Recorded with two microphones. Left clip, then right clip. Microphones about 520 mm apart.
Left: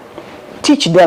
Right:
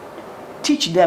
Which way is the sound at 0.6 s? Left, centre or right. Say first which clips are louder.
Left 8 dB; left.